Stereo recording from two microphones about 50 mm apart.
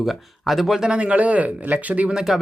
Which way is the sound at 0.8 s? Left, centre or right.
Centre.